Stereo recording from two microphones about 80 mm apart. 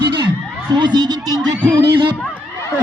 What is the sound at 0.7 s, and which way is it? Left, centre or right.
Speech, right.